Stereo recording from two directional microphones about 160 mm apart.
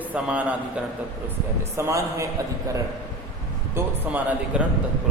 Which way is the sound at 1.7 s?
20° right (ahead or behind).